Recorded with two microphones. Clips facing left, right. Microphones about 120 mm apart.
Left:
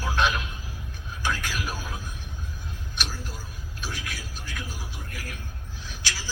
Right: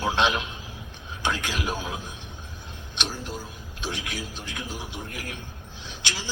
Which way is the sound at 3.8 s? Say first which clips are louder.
Right 4 dB; 20° right (ahead or behind).